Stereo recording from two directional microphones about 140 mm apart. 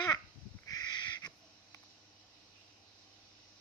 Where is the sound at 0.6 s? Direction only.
30° left (ahead or behind).